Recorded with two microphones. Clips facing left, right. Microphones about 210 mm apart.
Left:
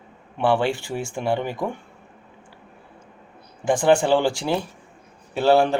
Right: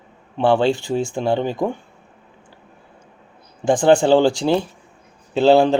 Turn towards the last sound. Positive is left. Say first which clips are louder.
# right 4 dB
turn(degrees=-25)  # may be behind; listen again after turning